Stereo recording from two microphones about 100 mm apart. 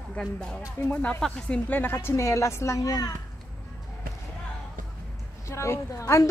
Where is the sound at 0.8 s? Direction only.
15° left (ahead or behind); by 3.1 s 35° left (ahead or behind).